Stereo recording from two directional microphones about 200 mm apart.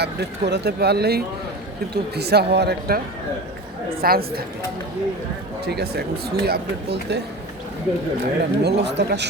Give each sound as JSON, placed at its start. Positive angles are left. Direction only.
{"t": 0.0, "sound": "speech", "side_deg": -55}
{"t": 4.0, "sound": "speech", "side_deg": -50}
{"t": 5.6, "sound": "speech", "side_deg": -55}
{"t": 8.2, "sound": "speech", "side_deg": -55}